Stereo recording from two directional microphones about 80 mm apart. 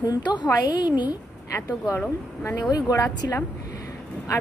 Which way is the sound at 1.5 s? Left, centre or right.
Left.